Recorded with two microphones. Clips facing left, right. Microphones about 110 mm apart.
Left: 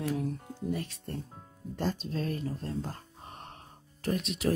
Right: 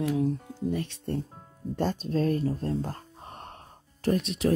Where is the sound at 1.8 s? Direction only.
40° right (ahead or behind).